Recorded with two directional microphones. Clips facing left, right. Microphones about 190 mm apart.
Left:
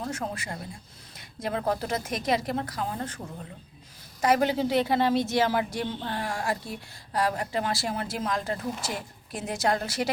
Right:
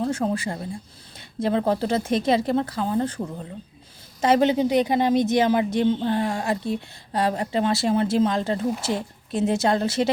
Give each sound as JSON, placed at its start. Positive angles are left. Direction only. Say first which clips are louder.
{"t": 0.0, "sound": "a woman's voice", "louder": "right 9 dB", "side_deg": -30}
{"t": 4.2, "sound": "a woman's voice", "louder": "right 5 dB", "side_deg": -25}